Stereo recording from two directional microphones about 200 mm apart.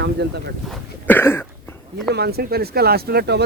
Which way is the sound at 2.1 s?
55° right (ahead or behind).